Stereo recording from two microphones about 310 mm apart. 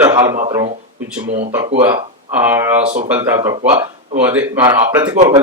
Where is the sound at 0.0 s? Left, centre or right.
Centre.